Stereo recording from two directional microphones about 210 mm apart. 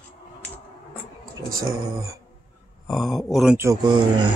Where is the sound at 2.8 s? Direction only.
Centre (ahead or behind).